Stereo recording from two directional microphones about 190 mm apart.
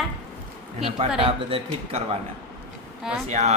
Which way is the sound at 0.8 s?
30° right (ahead or behind).